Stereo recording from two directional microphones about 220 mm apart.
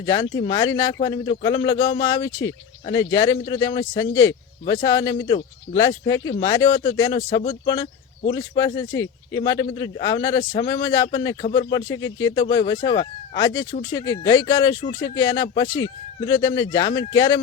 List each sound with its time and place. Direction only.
0.0 s a man's voice: 20° left (ahead or behind)